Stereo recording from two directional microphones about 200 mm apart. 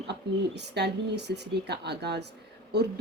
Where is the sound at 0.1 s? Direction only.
55° right (ahead or behind).